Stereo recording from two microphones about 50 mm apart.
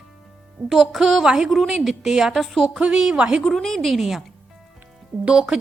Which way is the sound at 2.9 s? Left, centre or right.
Centre.